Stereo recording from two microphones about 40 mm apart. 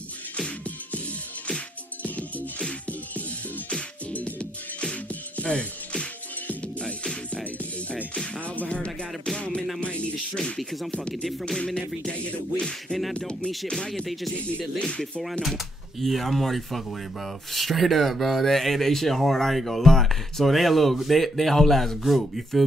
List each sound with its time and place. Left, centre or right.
2.0 s music: left
4.1 s music: left; by 7.4 s centre
8.5 s music: left
10.6 s speech: centre
10.9 s music: left
13.7 s speech: centre
14.8 s music: left
15.4 s speech: centre